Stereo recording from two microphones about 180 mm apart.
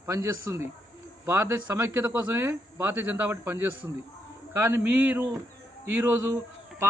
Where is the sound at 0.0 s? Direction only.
15° right (ahead or behind).